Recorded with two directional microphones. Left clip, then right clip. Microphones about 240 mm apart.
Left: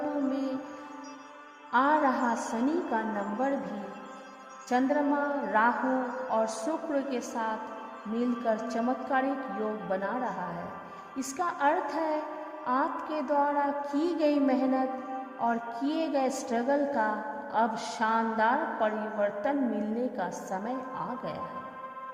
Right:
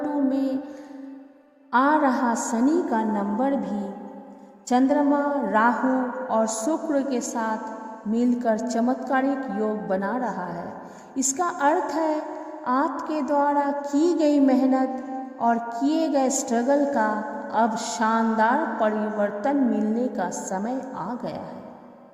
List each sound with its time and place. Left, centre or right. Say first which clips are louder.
0.3 s music: right 7 dB; right
1.7 s speech: right 5 dB; right
2.6 s music: right 7 dB; right
4.7 s music: right 6 dB; right
11.2 s music: right 6 dB; right